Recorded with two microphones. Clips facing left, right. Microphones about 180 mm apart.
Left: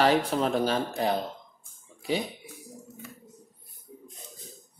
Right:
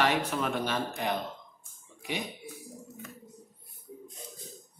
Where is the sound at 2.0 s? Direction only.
30° left (ahead or behind).